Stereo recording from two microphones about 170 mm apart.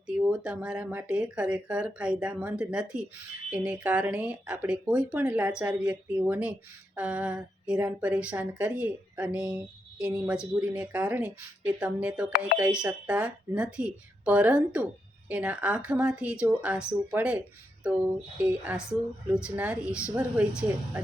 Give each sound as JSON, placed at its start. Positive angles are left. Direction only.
{"t": 0.1, "sound": "speech", "side_deg": -5}